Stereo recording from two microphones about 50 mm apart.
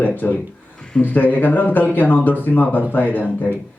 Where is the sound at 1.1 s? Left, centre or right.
Left.